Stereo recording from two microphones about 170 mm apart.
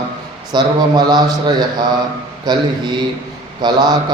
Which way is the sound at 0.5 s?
25° right (ahead or behind).